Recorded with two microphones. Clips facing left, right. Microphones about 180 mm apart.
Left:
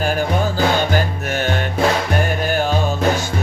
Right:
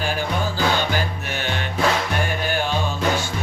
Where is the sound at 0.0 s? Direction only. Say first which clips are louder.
Left 5 dB; 45° left (ahead or behind).